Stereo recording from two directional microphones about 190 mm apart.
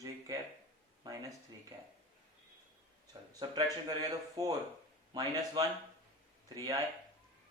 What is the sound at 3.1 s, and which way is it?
Speech, 25° right (ahead or behind).